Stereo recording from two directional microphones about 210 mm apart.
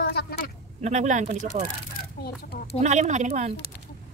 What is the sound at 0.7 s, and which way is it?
Speech, 35° right (ahead or behind).